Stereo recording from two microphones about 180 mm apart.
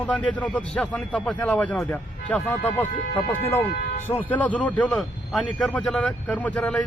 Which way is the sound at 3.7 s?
55° left (ahead or behind).